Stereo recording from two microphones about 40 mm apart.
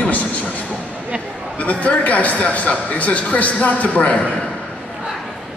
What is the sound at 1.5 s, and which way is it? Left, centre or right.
A man's voice, left.